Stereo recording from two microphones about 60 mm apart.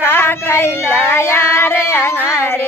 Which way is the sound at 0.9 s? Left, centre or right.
Left.